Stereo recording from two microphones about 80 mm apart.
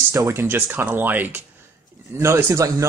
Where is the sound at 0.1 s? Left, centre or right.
Right.